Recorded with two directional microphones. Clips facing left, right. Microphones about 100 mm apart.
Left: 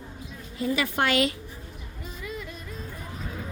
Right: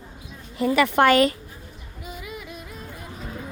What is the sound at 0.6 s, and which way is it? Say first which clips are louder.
Speech: right 7 dB; 65° right (ahead or behind).